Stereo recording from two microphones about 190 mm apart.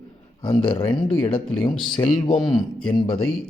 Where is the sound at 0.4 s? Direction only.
25° left (ahead or behind).